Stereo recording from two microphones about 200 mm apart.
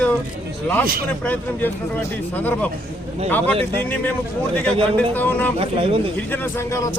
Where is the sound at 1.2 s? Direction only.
10° left (ahead or behind).